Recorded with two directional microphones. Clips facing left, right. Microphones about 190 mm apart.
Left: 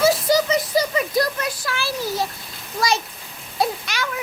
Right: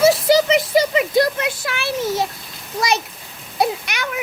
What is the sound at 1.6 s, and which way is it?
Speech, 65° right (ahead or behind).